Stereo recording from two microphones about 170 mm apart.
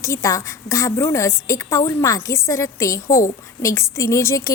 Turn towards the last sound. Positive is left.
turn(degrees=20)  # may be behind; listen again after turning